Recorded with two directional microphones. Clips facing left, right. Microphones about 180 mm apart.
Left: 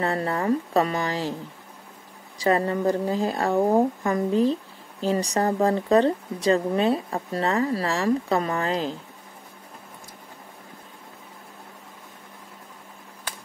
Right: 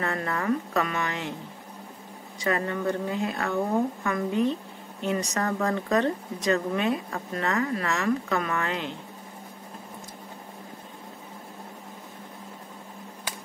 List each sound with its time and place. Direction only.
0.0 s speech: 30° left (ahead or behind)
2.3 s speech: 35° left (ahead or behind)